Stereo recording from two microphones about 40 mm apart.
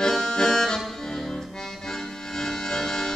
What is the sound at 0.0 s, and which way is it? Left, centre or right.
Music, centre.